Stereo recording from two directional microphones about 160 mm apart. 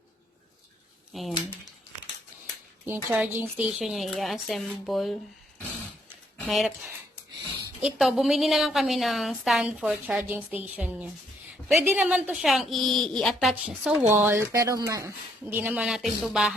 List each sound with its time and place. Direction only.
1.1 s speech: centre (ahead or behind)
2.8 s a woman's voice: 15° right (ahead or behind)
6.4 s speech: centre (ahead or behind)
7.9 s a woman's voice: centre (ahead or behind)
14.1 s speech: 15° right (ahead or behind)